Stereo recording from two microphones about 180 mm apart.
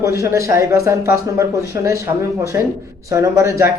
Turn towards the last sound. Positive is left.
turn(degrees=-15)  # may be behind; listen again after turning